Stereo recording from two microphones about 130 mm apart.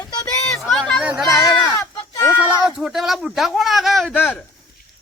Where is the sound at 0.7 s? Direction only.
5° left (ahead or behind).